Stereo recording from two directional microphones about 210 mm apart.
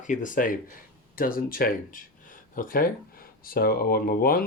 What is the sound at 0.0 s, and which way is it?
Speech, 35° left (ahead or behind).